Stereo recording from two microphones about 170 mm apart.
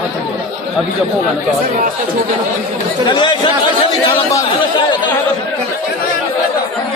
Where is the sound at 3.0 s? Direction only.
25° left (ahead or behind).